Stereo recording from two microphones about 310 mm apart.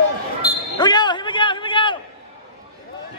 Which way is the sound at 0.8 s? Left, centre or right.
Centre.